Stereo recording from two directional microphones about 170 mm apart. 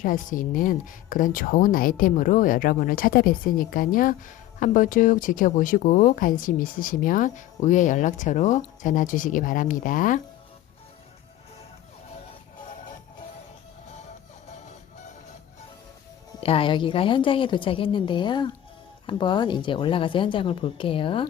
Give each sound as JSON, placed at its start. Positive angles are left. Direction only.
{"t": 0.0, "sound": "speech", "side_deg": 50}
{"t": 16.4, "sound": "a woman's voice", "side_deg": 35}